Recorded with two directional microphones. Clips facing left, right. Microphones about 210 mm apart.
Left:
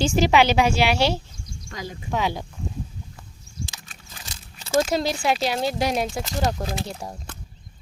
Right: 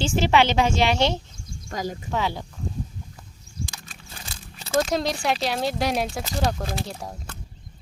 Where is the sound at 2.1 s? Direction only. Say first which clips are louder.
Left 3 dB; 15° left (ahead or behind).